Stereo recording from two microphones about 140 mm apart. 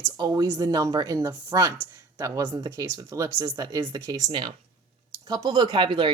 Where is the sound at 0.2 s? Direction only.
30° right (ahead or behind).